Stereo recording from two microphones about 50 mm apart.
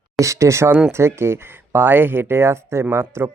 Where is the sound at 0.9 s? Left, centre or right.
Right.